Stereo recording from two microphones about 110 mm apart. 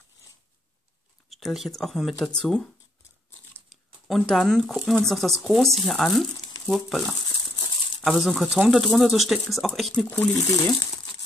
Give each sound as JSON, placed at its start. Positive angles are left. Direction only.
{"t": 1.3, "sound": "speech", "side_deg": 0}
{"t": 4.1, "sound": "speech", "side_deg": 5}
{"t": 8.0, "sound": "speech", "side_deg": 5}
{"t": 10.0, "sound": "speech", "side_deg": 15}
{"t": 10.5, "sound": "speech", "side_deg": 30}